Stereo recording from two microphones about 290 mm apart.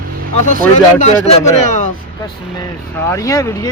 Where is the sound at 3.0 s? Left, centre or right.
Centre.